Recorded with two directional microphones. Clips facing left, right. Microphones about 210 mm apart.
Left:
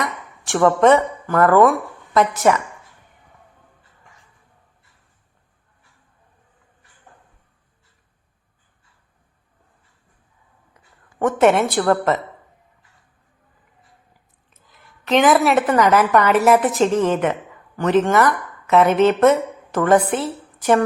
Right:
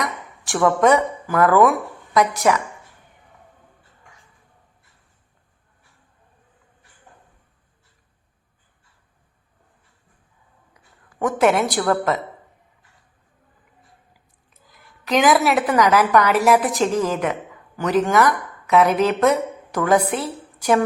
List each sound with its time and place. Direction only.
0.0 s a woman's voice: centre (ahead or behind)
11.2 s a woman's voice: centre (ahead or behind)
15.0 s a woman's voice: 5° right (ahead or behind)